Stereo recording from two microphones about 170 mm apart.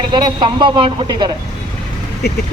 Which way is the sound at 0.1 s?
25° right (ahead or behind).